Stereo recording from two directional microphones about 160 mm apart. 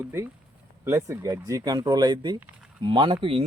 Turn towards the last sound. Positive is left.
turn(degrees=-35)  # may be behind; listen again after turning